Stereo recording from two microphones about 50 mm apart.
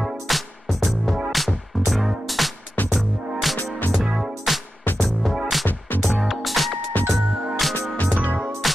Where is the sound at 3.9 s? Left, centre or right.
Centre.